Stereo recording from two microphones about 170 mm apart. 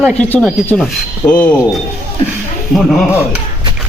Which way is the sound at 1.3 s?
10° left (ahead or behind).